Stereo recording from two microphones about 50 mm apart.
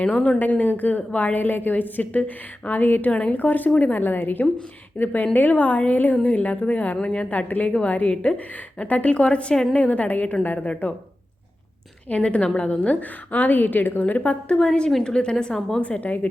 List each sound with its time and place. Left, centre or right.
0.1 s a woman's voice: left
3.1 s a woman's voice: left
3.3 s a woman's voice: left
12.0 s a woman's voice: left
14.0 s a woman's voice: left
15.8 s a woman's voice: left